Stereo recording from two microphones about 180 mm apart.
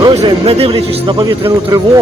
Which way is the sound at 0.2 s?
30° right (ahead or behind).